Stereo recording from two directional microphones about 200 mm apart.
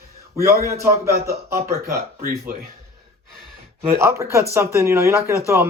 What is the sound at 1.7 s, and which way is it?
Speech, 15° right (ahead or behind).